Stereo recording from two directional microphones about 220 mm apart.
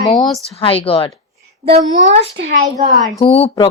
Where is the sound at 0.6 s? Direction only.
25° left (ahead or behind).